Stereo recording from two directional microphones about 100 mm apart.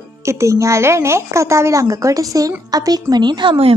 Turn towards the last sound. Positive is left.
turn(degrees=-50)  # may be behind; listen again after turning